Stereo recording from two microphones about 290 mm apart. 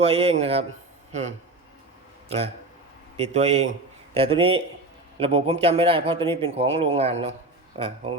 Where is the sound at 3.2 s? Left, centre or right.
Right.